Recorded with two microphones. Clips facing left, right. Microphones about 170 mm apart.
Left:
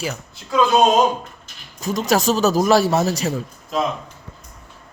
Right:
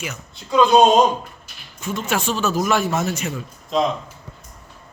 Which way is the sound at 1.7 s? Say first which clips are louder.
Left 5 dB; 40° left (ahead or behind).